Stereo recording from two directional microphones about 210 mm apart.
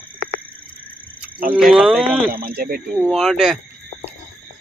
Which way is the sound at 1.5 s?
5° right (ahead or behind).